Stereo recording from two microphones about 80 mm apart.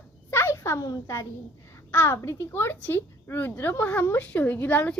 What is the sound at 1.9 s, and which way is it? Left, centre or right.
A woman's voice, left.